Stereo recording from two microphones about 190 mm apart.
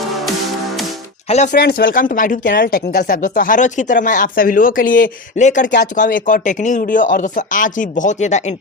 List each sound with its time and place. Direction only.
1.5 s speech: 60° left (ahead or behind)
2.5 s speech: 55° left (ahead or behind); by 8.5 s 40° left (ahead or behind)